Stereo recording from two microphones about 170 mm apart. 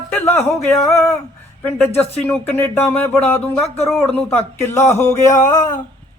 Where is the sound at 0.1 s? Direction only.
10° left (ahead or behind).